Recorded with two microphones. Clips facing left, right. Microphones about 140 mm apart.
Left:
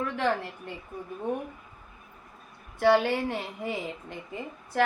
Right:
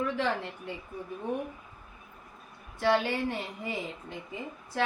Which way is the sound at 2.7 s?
55° left (ahead or behind).